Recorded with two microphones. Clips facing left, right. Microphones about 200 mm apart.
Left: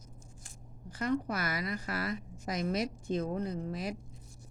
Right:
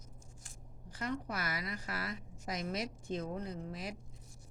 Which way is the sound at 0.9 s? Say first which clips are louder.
Left 7 dB; 45° left (ahead or behind).